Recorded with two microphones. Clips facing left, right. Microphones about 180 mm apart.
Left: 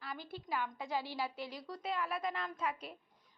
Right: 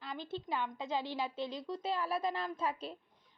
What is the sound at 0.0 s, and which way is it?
A woman's voice, 20° right (ahead or behind).